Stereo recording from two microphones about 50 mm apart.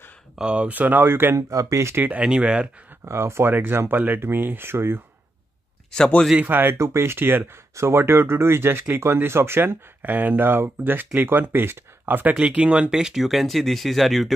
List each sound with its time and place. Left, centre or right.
0.4 s speech: right
1.5 s speech: right
2.2 s speech: centre
3.1 s speech: right
3.5 s speech: right
5.9 s speech: centre
6.4 s speech: right
6.8 s speech: right
7.7 s speech: right
12.4 s speech: right; by 14.3 s centre